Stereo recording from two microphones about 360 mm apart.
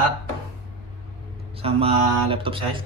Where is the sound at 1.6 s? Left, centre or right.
Centre.